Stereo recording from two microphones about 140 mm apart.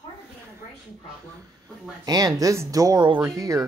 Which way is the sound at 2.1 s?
25° right (ahead or behind).